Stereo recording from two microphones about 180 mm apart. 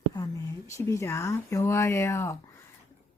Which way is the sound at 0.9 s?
15° left (ahead or behind).